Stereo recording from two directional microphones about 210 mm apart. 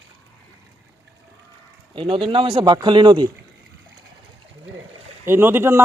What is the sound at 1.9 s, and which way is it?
Speech, 25° right (ahead or behind).